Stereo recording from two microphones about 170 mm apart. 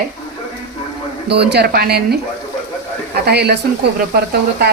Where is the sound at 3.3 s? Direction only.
75° right (ahead or behind).